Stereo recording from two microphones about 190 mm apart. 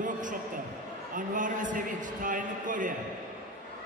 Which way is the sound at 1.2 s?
45° right (ahead or behind).